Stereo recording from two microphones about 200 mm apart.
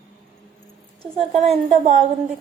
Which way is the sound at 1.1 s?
30° right (ahead or behind).